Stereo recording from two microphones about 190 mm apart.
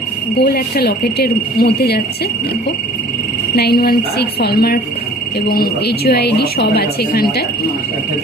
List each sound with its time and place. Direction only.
0.4 s speech: 55° left (ahead or behind)
3.5 s speech: 55° left (ahead or behind)